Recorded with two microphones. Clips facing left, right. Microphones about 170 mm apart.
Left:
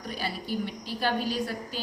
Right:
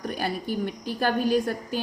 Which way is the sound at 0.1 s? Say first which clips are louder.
Right 2 dB; 50° right (ahead or behind).